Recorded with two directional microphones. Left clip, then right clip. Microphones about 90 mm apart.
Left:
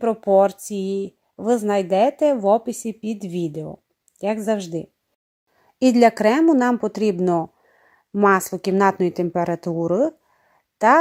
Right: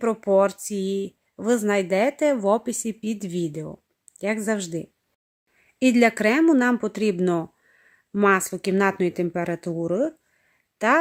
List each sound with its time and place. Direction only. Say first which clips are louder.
0.0 s speech: left 3 dB; 5° left (ahead or behind)
8.2 s speech: left 3 dB; 15° left (ahead or behind)